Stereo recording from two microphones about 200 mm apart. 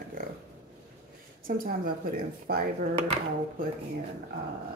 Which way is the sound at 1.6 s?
45° right (ahead or behind).